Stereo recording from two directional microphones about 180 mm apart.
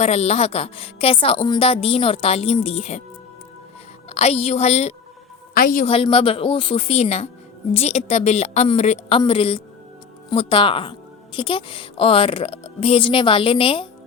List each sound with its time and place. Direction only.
0.0 s a woman's voice: 35° left (ahead or behind)
4.1 s a woman's voice: 35° left (ahead or behind)
5.5 s a woman's voice: 55° left (ahead or behind)
5.8 s a woman's voice: 30° left (ahead or behind)